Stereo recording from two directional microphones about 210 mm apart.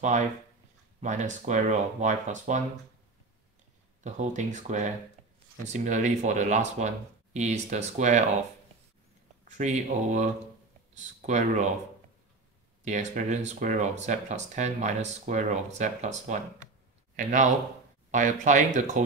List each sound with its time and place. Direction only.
1.0 s speech: 35° right (ahead or behind)
4.0 s speech: 35° right (ahead or behind)
9.4 s speech: 35° right (ahead or behind)
12.8 s speech: 35° right (ahead or behind)
18.1 s speech: 35° right (ahead or behind)